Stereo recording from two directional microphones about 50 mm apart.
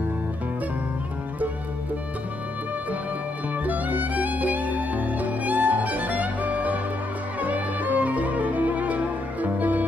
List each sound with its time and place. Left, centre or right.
3.6 s music: right